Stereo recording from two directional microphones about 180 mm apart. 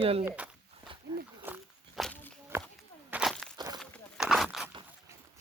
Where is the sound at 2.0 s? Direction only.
5° left (ahead or behind).